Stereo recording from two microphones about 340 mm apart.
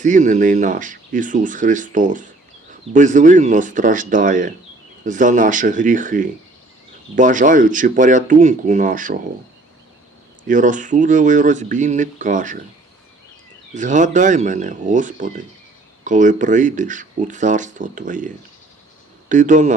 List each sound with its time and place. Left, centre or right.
0.0 s speech: right
10.4 s speech: right
13.7 s speech: right
19.3 s speech: right